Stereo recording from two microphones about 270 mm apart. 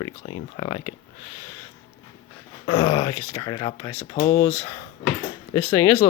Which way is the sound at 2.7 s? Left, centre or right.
Centre.